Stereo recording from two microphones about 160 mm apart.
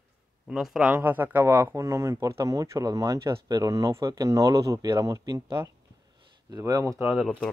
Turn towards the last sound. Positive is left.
turn(degrees=-5)  # may be behind; listen again after turning